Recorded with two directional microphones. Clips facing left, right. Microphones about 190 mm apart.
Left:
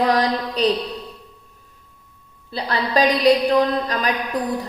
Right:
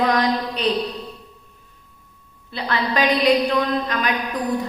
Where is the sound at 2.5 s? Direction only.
35° left (ahead or behind).